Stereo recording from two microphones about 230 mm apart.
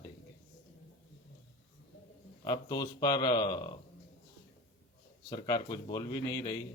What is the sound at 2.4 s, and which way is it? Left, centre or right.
Speech, centre.